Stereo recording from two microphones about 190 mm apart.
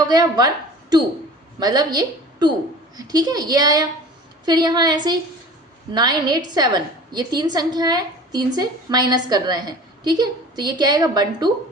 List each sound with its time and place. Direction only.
0.1 s a woman's voice: 20° right (ahead or behind)